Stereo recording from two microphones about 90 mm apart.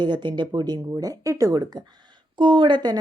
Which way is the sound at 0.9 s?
40° right (ahead or behind).